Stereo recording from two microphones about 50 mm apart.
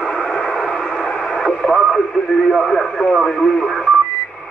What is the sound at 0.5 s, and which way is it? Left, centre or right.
Radio, centre.